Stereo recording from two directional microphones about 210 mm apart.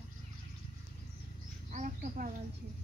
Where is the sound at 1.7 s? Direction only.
40° right (ahead or behind).